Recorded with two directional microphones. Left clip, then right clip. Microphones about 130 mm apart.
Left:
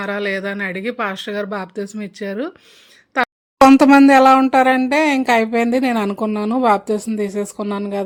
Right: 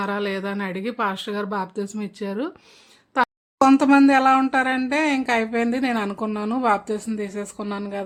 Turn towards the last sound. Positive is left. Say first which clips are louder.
# left 6 dB
turn(degrees=40)  # may be behind; listen again after turning